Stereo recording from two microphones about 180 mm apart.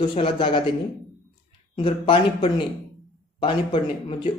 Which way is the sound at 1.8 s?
30° left (ahead or behind).